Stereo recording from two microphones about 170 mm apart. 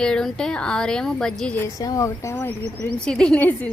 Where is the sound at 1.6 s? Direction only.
20° left (ahead or behind).